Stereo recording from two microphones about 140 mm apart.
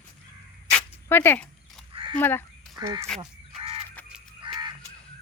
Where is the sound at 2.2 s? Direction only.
15° left (ahead or behind).